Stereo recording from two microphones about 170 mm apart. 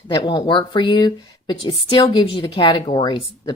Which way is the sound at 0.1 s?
25° left (ahead or behind).